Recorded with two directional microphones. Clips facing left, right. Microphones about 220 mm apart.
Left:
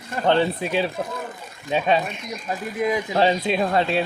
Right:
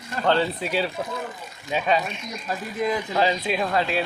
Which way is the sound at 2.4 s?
15° left (ahead or behind).